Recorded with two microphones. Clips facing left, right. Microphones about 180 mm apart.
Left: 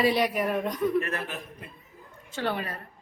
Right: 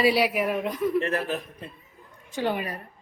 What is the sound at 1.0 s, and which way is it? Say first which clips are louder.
Speech: right 6 dB; 35° right (ahead or behind).